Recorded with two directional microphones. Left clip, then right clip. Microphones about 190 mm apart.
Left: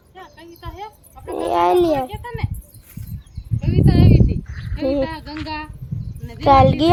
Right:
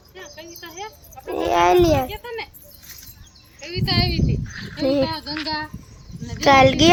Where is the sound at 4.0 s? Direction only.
60° left (ahead or behind).